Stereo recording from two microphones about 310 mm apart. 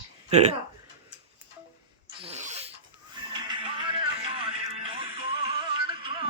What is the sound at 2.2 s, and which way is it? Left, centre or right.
Zipper, right.